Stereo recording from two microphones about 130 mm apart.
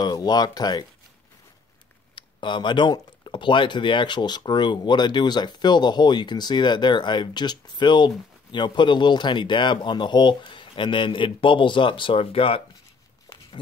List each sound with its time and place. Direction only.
0.0 s speech: 30° left (ahead or behind)
2.1 s speech: 35° left (ahead or behind)